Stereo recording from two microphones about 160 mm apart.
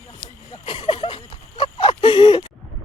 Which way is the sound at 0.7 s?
35° left (ahead or behind).